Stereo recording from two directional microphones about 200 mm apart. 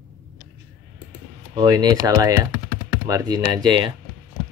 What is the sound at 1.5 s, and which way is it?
Speech, 20° right (ahead or behind).